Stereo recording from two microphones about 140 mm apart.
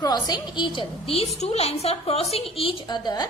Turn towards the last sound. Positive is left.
turn(degrees=30)  # may be behind; listen again after turning